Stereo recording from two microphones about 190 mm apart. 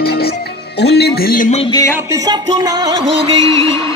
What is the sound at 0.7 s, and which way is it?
Speech, 60° left (ahead or behind).